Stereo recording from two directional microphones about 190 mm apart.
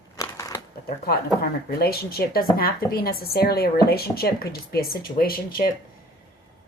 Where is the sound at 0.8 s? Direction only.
55° left (ahead or behind).